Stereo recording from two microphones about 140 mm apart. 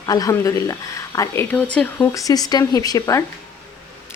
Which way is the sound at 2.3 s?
30° left (ahead or behind).